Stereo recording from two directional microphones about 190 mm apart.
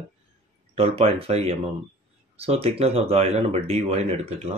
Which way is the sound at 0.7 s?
30° right (ahead or behind).